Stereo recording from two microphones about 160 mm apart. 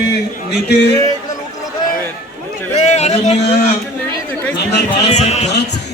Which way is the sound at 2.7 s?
45° left (ahead or behind).